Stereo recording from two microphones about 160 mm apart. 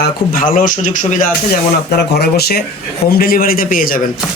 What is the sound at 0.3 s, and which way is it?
Speech, 55° left (ahead or behind).